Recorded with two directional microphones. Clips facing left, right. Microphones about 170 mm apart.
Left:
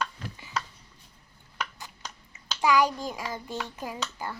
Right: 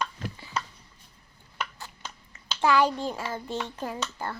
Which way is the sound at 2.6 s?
10° left (ahead or behind).